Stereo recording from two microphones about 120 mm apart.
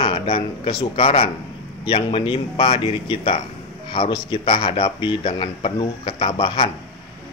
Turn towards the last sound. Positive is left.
turn(degrees=45)  # may be behind; listen again after turning